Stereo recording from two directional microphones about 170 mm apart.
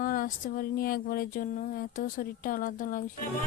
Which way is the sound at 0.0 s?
55° left (ahead or behind).